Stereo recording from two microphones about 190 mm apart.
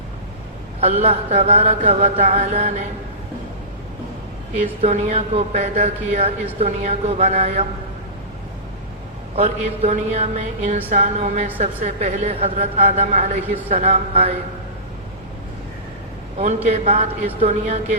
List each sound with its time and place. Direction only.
0.8 s a woman's voice: 35° right (ahead or behind)
4.5 s a woman's voice: 40° right (ahead or behind)
9.3 s a woman's voice: 35° right (ahead or behind)
16.6 s a woman's voice: 35° right (ahead or behind)